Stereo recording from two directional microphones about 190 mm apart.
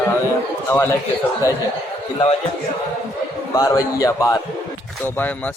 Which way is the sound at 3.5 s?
20° left (ahead or behind).